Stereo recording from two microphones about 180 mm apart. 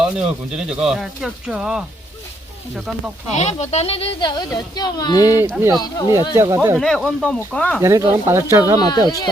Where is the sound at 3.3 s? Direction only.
40° left (ahead or behind); by 5.4 s 20° left (ahead or behind).